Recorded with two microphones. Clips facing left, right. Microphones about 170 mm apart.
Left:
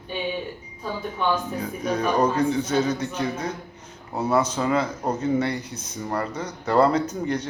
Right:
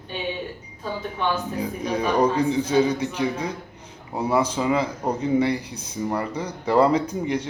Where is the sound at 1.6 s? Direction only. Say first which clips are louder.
Even; 10° right (ahead or behind).